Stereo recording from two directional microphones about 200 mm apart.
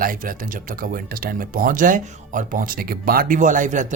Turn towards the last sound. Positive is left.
turn(degrees=-40)  # may be behind; listen again after turning